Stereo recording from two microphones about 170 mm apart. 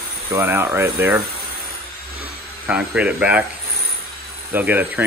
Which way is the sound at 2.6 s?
5° right (ahead or behind).